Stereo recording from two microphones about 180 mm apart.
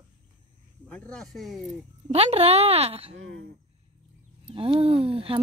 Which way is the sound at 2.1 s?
35° right (ahead or behind).